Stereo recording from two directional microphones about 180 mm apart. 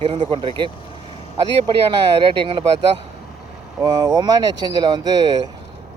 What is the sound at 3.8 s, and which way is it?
Speech, 20° right (ahead or behind).